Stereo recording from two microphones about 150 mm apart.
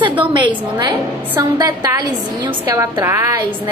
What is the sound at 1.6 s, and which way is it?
A woman's voice, 25° right (ahead or behind).